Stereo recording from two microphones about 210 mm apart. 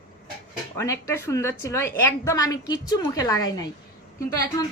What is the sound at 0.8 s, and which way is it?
A woman's voice, 15° left (ahead or behind).